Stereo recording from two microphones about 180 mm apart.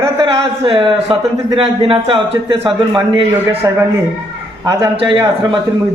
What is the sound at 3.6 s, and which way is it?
Speech, 20° right (ahead or behind).